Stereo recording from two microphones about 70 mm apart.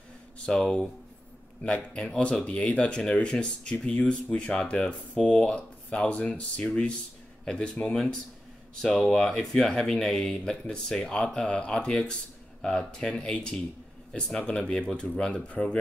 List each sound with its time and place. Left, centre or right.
0.5 s speech: centre
2.0 s speech: centre
7.9 s speech: centre